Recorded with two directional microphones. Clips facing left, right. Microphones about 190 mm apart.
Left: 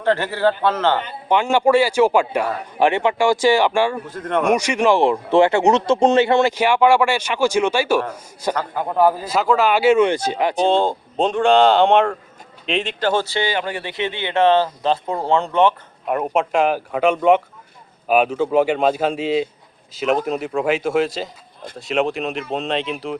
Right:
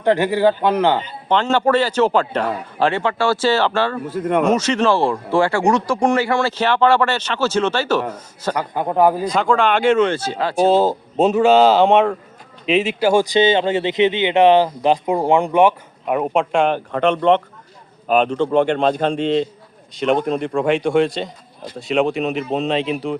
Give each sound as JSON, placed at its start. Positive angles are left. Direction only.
{"t": 0.0, "sound": "speech", "side_deg": -15}
{"t": 1.3, "sound": "speech", "side_deg": 10}
{"t": 4.0, "sound": "speech", "side_deg": -10}
{"t": 4.4, "sound": "speech", "side_deg": 15}
{"t": 8.5, "sound": "speech", "side_deg": -15}
{"t": 9.2, "sound": "speech", "side_deg": 5}
{"t": 10.6, "sound": "speech", "side_deg": -5}
{"t": 16.1, "sound": "speech", "side_deg": 0}